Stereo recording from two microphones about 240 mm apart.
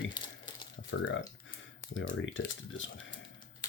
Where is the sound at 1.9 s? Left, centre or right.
Left.